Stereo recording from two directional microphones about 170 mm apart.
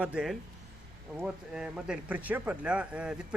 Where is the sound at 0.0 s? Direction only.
5° right (ahead or behind).